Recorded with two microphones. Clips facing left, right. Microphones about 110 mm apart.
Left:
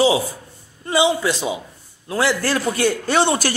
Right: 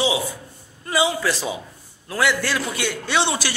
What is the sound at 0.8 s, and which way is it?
A man's voice, 25° left (ahead or behind).